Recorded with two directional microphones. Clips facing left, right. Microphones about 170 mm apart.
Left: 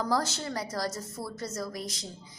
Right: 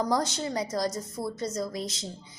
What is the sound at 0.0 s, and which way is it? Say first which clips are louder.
A woman's voice: right 2 dB; 15° right (ahead or behind).